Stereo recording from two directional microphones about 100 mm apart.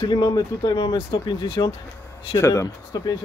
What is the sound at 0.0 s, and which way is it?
Speech, 45° left (ahead or behind).